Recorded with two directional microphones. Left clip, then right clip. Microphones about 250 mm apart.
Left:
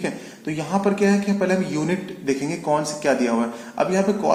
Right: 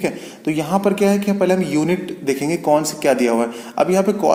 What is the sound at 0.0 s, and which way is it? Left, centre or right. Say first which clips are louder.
Speech: right 6 dB; right.